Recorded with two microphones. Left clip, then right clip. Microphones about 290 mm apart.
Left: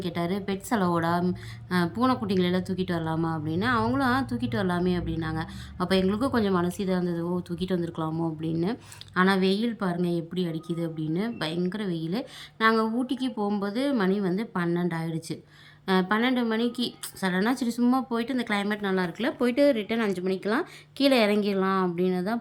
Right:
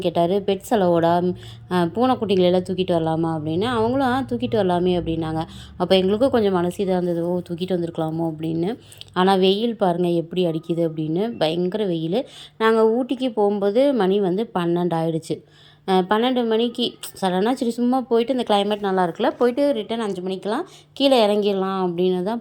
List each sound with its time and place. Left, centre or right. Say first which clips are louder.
0.0 s speech: right 11 dB; centre
18.6 s speech: right 7 dB; centre
18.9 s speech: right 8 dB; centre